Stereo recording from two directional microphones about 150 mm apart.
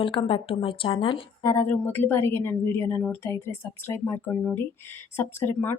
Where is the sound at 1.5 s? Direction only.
15° left (ahead or behind).